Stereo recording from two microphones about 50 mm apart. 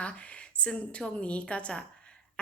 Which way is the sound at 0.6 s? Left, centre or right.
Left.